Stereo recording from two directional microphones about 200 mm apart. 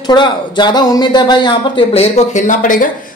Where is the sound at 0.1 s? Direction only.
20° left (ahead or behind).